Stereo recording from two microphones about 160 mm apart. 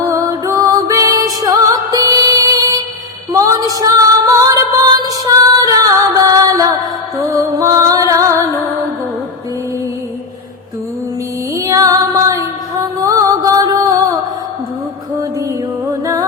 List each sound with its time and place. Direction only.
0.0 s music: 20° right (ahead or behind)
3.3 s female singing: 20° right (ahead or behind)
5.0 s music: 20° right (ahead or behind)
11.5 s music: 20° right (ahead or behind)